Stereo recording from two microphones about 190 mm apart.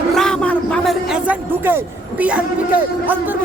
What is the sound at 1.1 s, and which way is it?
Speech, 5° right (ahead or behind).